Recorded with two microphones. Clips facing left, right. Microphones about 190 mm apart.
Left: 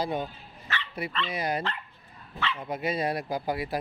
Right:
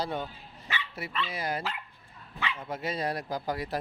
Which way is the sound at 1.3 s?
15° left (ahead or behind).